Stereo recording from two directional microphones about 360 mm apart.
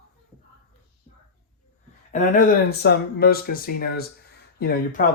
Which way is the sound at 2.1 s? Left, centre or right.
Left.